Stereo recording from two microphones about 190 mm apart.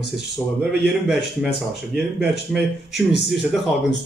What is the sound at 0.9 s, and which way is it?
Speech, centre (ahead or behind).